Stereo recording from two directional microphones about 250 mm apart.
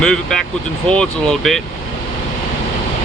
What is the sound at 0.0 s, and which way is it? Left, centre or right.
Speech, centre.